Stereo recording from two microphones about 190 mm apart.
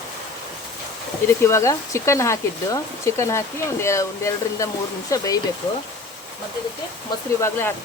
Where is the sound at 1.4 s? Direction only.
15° left (ahead or behind).